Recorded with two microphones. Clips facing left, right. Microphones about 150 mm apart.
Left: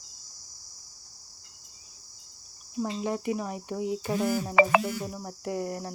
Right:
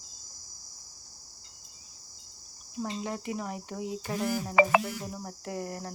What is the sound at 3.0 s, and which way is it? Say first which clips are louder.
Cricket: left 5 dB; 15° left (ahead or behind).